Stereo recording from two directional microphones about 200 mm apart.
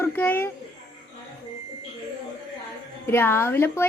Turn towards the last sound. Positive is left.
turn(degrees=10)  # may be behind; listen again after turning